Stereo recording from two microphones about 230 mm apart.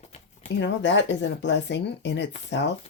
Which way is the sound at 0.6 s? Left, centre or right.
Left.